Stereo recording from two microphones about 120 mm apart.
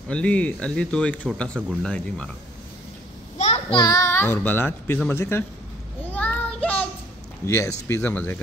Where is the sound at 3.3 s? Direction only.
65° left (ahead or behind).